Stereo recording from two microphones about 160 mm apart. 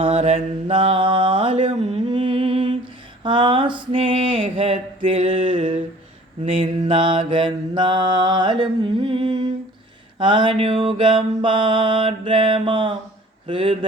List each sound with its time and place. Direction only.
0.2 s mantra: 50° right (ahead or behind)
0.7 s mantra: 35° right (ahead or behind)